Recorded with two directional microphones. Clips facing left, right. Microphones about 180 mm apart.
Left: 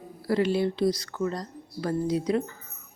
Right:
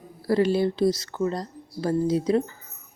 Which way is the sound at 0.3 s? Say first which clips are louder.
Right 3 dB; 35° right (ahead or behind).